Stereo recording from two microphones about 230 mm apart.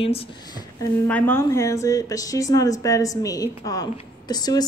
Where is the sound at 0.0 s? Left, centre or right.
Left.